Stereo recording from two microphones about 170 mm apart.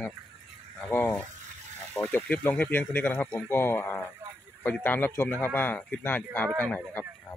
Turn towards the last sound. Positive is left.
turn(degrees=10)  # may be behind; listen again after turning